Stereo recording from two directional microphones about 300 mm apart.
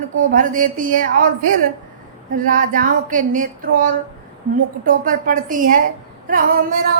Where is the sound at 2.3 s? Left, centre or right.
Right.